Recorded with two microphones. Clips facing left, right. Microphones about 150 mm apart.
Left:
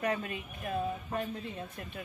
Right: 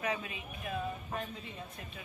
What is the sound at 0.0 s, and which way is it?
Speech, 50° left (ahead or behind).